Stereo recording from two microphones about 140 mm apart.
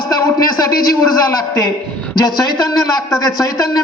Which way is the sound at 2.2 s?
30° left (ahead or behind).